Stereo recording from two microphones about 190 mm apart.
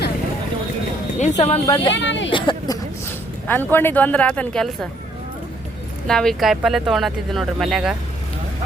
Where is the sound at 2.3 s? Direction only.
25° left (ahead or behind).